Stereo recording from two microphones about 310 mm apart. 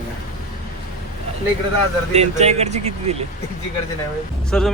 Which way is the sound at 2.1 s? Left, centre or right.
Right.